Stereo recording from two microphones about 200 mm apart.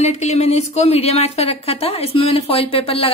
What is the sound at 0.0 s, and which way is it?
A woman's voice, 35° left (ahead or behind).